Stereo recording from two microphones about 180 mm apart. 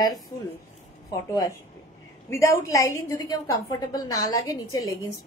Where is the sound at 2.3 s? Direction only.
15° left (ahead or behind).